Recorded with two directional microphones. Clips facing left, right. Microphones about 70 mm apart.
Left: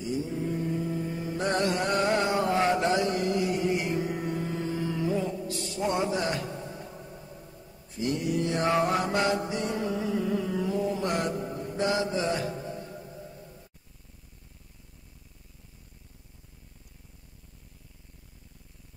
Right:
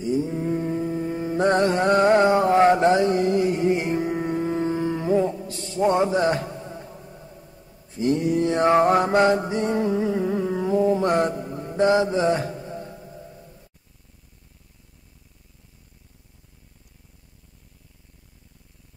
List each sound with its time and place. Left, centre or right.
0.1 s mantra: right
5.8 s a sound: right
8.0 s mantra: right